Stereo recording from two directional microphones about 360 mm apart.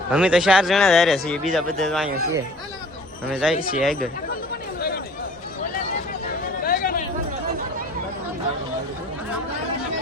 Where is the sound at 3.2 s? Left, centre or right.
Centre.